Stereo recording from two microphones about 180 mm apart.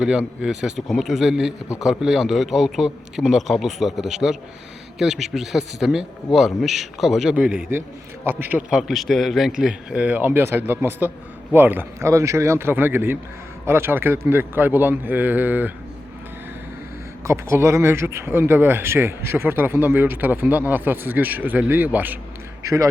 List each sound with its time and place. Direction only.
0.0 s a man's voice: 5° right (ahead or behind)
17.2 s speech: 15° right (ahead or behind)